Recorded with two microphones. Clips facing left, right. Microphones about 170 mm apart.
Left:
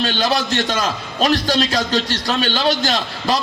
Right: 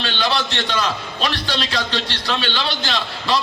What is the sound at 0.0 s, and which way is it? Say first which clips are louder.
A man's voice: left 3 dB; 45° left (ahead or behind).